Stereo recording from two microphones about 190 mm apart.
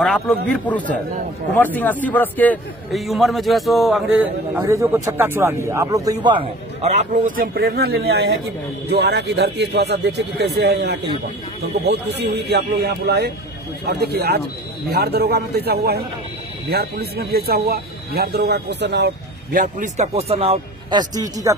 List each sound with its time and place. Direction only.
0.0 s a man's voice: 5° left (ahead or behind)
4.6 s speech: 15° right (ahead or behind); by 19.1 s 60° right (ahead or behind)
19.5 s a man's voice: 40° right (ahead or behind); by 21.5 s 20° right (ahead or behind)